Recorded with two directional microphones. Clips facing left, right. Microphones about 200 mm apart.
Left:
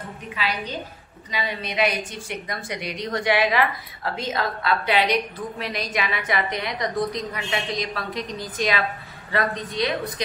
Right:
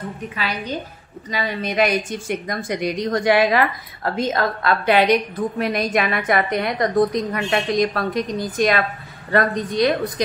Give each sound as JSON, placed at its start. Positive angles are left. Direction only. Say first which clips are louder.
{"t": 0.4, "sound": "a woman's voice", "louder": "right 2 dB", "side_deg": -45}